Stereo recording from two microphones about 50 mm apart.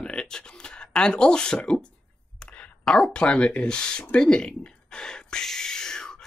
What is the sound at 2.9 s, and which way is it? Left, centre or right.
Speech, centre.